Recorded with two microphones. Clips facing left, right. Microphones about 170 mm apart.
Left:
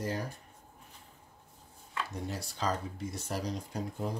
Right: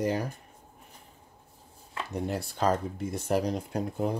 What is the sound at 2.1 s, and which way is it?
Speech, 60° right (ahead or behind).